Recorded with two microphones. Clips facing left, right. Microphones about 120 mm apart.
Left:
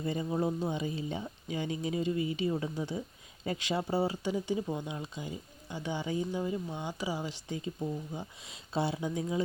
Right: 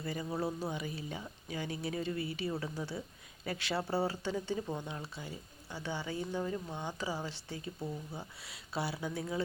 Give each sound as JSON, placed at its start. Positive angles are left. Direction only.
{"t": 0.0, "sound": "speech", "side_deg": 25}